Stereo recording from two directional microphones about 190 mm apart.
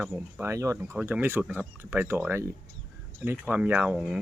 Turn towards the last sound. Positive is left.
turn(degrees=-5)  # may be behind; listen again after turning